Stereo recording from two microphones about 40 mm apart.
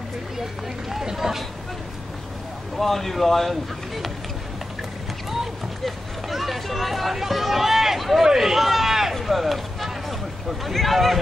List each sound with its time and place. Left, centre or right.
0.4 s run: centre
2.8 s speech: centre
5.3 s speech: centre
8.3 s a sound: centre
10.6 s speech: centre